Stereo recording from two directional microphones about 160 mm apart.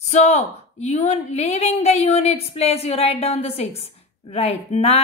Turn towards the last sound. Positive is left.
turn(degrees=40)  # may be behind; listen again after turning